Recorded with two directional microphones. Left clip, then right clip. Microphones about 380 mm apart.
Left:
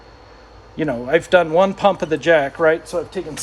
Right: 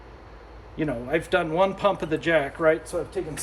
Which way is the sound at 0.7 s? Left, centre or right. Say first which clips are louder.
Left 8 dB; centre.